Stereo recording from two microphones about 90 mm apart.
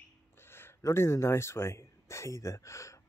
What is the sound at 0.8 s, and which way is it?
Speech, 30° left (ahead or behind).